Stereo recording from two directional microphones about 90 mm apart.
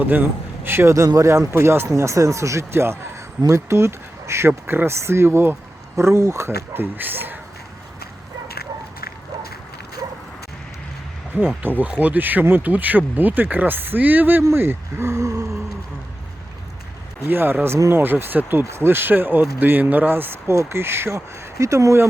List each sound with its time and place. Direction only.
0.0 s a man's voice: 20° right (ahead or behind)
11.3 s a man's voice: 20° right (ahead or behind); by 15.4 s 40° right (ahead or behind)
17.2 s a man's voice: 25° right (ahead or behind)